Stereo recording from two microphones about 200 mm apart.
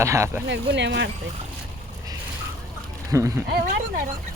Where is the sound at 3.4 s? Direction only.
50° right (ahead or behind).